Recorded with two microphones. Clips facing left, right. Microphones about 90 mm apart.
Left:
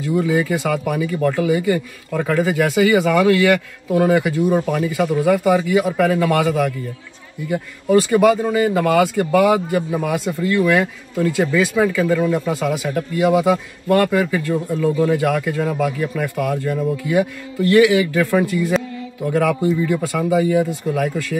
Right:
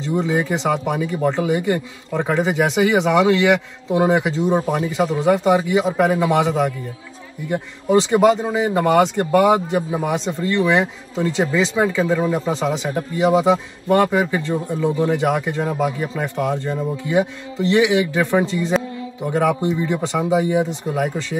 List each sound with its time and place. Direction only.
0.0 s speech: 20° right (ahead or behind)